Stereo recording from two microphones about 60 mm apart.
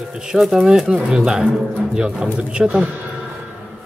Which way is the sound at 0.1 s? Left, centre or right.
Centre.